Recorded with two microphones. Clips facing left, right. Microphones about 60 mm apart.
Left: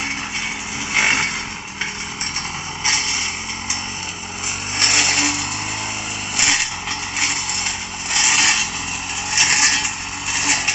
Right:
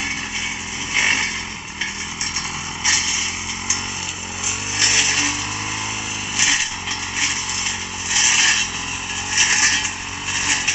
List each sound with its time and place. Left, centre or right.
0.9 s vehicle: left
4.8 s vehicle: left
8.1 s vehicle: left